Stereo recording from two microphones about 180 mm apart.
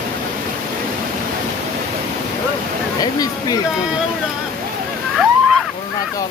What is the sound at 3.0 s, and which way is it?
Speech, 20° left (ahead or behind).